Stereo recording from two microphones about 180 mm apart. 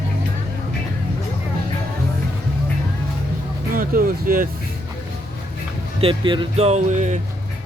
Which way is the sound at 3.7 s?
50° right (ahead or behind).